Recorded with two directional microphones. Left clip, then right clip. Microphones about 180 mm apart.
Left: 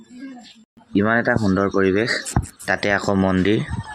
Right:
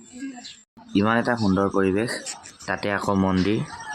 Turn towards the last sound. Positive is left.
turn(degrees=0)  # may be behind; listen again after turning